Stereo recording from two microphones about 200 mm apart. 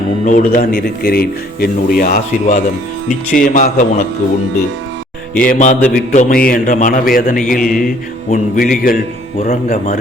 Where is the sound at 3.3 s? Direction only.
40° left (ahead or behind).